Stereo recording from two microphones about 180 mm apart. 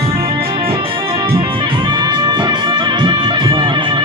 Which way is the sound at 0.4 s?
30° right (ahead or behind).